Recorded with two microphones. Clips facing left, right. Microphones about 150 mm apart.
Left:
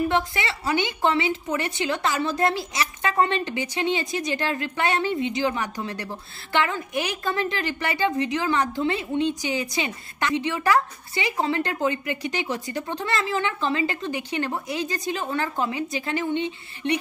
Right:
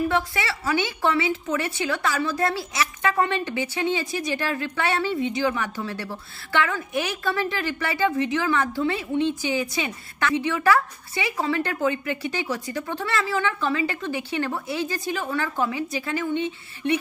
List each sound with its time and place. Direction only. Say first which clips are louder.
0.1 s a woman's voice: even; 20° left (ahead or behind)